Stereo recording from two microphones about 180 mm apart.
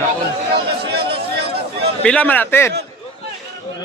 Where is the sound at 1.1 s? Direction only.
65° right (ahead or behind).